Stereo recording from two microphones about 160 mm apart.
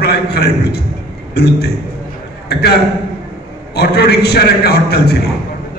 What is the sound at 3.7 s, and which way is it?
A man's voice, 90° left.